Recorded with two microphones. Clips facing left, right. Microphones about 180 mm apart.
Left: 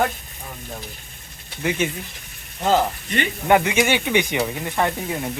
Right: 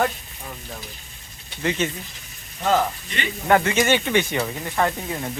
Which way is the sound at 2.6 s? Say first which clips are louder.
Left 2 dB; 30° left (ahead or behind).